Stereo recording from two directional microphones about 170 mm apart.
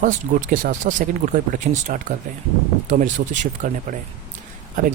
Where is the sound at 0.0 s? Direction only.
50° right (ahead or behind).